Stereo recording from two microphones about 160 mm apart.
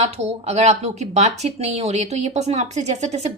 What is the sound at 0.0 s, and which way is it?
Speech, 45° right (ahead or behind).